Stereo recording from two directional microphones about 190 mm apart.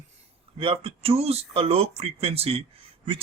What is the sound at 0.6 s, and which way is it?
Speech, 30° right (ahead or behind).